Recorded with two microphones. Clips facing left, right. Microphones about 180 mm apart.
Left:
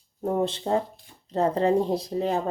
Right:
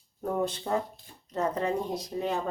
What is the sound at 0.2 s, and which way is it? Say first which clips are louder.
Speech: left 4 dB; 25° left (ahead or behind).